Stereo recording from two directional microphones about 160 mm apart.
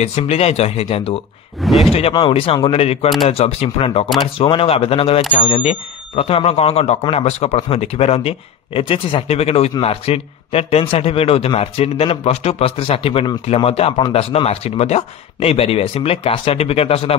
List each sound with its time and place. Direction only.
0.0 s speech: 40° left (ahead or behind)
1.6 s speech: centre (ahead or behind)
1.9 s speech: 40° left (ahead or behind)